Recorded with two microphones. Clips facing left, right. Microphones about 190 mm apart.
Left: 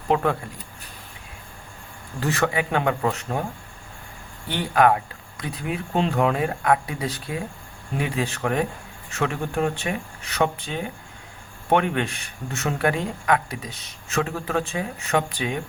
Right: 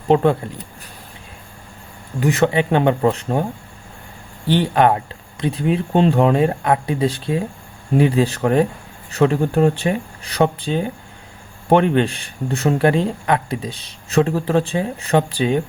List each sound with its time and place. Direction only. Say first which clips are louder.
0.1 s speech: right 7 dB; 30° right (ahead or behind)
2.2 s speech: right 7 dB; 20° right (ahead or behind)
4.4 s speech: right 4 dB; 30° right (ahead or behind)